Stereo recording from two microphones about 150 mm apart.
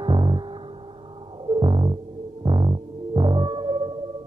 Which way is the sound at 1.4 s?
30° right (ahead or behind).